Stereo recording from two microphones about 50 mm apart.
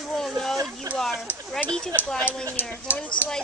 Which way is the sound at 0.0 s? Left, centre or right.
Centre.